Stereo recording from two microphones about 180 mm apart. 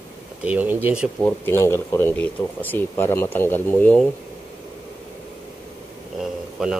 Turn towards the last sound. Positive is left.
turn(degrees=-5)  # may be behind; listen again after turning